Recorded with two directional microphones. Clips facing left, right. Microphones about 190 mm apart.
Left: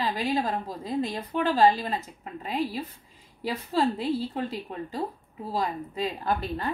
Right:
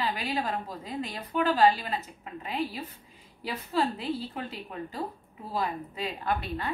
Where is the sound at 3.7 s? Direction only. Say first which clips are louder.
Left 3 dB; 35° left (ahead or behind).